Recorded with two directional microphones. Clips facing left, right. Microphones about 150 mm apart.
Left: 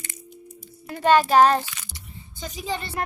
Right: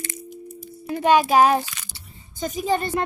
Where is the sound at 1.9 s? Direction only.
30° right (ahead or behind).